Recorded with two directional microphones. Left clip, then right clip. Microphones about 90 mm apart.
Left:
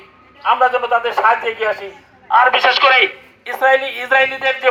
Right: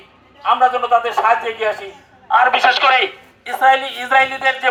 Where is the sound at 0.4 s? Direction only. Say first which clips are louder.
Even; 40° right (ahead or behind).